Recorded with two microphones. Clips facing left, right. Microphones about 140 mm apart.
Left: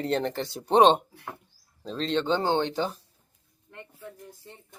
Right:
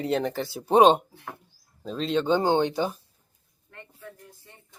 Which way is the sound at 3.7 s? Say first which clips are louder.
Left 1 dB; 20° left (ahead or behind).